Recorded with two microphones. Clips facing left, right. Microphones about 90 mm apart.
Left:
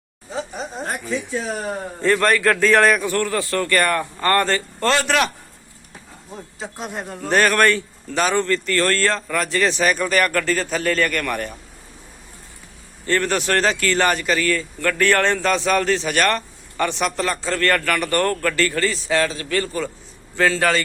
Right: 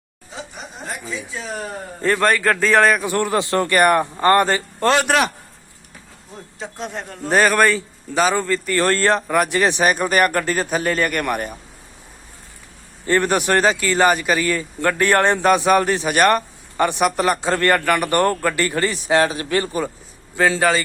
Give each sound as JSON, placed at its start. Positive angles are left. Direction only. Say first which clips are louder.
{"t": 2.0, "sound": "a man's voice", "louder": "even", "side_deg": -5}
{"t": 3.1, "sound": "a man's voice", "louder": "right 2 dB", "side_deg": -15}
{"t": 6.6, "sound": "a man's voice", "louder": "right 1 dB", "side_deg": 5}
{"t": 13.1, "sound": "a man's voice", "louder": "right 3 dB", "side_deg": -15}